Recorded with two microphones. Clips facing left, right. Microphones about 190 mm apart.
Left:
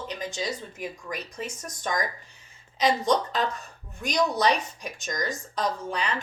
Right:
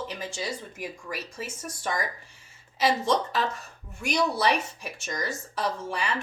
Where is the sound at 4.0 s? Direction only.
10° right (ahead or behind).